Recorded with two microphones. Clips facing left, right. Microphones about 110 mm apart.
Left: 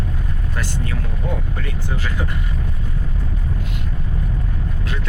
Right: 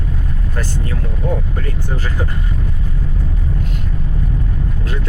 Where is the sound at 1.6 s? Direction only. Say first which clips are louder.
Right 3 dB; 40° right (ahead or behind).